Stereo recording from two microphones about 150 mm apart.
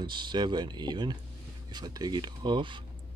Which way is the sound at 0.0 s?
30° right (ahead or behind).